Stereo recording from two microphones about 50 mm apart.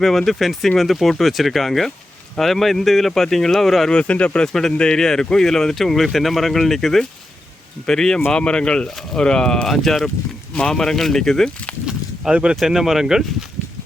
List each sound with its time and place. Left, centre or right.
0.0 s speech: centre
3.8 s speech: left
4.4 s speech: centre
9.6 s speech: centre
12.3 s speech: centre
12.5 s speech: centre